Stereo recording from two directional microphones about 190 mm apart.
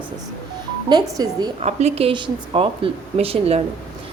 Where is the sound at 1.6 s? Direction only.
35° right (ahead or behind).